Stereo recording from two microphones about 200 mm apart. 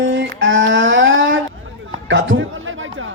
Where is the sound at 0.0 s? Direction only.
70° right (ahead or behind).